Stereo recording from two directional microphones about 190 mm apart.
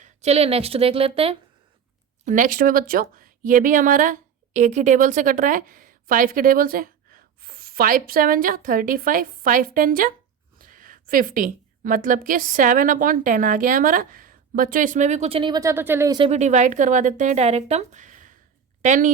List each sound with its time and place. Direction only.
0.0 s a woman's voice: 35° right (ahead or behind)
2.2 s a woman's voice: 45° right (ahead or behind); by 16.1 s 10° right (ahead or behind)
16.1 s a woman's voice: 30° right (ahead or behind)